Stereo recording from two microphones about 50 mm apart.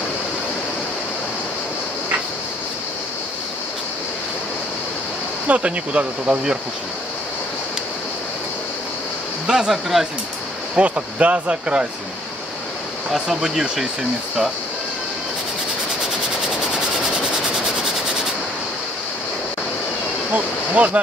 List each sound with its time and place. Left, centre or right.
5.5 s speech: right
9.5 s speech: centre
10.8 s speech: right
13.1 s speech: centre
20.3 s speech: right